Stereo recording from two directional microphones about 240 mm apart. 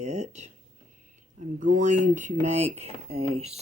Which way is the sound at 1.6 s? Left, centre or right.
Right.